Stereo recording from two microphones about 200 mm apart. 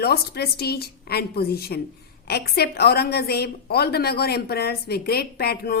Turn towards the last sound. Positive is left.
turn(degrees=50)  # may be behind; listen again after turning